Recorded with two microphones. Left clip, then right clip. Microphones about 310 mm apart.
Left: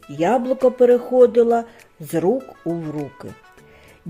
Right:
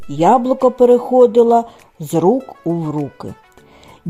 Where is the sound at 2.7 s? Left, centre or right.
Right.